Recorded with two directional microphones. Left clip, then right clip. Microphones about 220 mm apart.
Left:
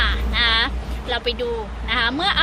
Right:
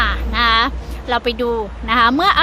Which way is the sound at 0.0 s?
30° right (ahead or behind).